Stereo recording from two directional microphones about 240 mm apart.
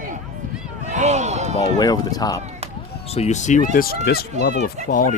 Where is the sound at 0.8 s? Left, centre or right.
Right.